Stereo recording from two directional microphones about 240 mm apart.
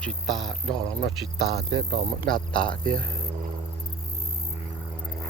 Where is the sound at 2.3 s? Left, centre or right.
Centre.